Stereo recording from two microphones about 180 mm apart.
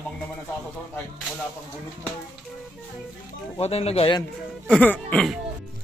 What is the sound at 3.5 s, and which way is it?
Speech, 35° left (ahead or behind).